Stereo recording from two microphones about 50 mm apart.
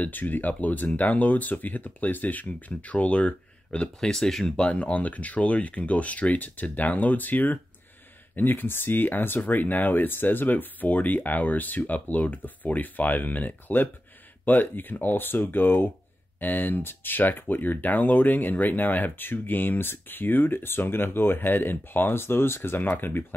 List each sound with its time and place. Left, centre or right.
0.0 s speech: left; by 4.6 s centre
4.6 s speech: left